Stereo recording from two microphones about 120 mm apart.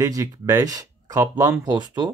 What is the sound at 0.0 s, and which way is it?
Speech, 30° right (ahead or behind).